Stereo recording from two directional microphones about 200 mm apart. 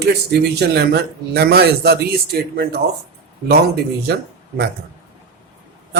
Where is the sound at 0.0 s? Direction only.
55° right (ahead or behind).